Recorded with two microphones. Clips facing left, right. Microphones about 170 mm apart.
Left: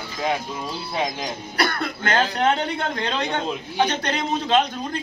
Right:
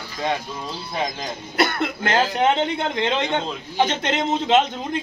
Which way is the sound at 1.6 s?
20° right (ahead or behind).